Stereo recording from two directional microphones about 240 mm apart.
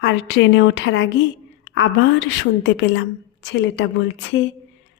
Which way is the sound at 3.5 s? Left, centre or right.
Left.